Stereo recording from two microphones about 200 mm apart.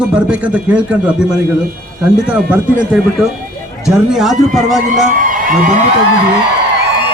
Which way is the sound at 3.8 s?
Centre (ahead or behind).